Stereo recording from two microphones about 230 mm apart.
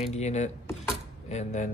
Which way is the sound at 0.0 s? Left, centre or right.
Left.